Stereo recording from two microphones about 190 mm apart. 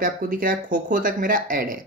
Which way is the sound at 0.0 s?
50° right (ahead or behind).